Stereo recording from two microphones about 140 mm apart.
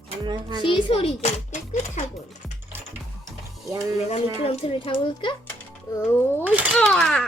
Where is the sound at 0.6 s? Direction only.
35° left (ahead or behind); by 2.0 s 55° left (ahead or behind).